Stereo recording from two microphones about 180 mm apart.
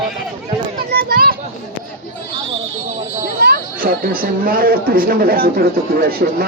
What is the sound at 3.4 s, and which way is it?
Speech, 60° right (ahead or behind).